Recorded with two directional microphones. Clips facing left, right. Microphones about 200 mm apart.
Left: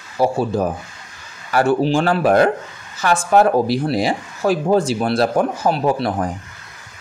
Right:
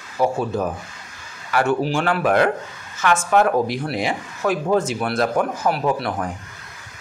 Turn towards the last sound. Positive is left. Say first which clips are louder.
# left 3 dB
turn(degrees=30)  # may be behind; listen again after turning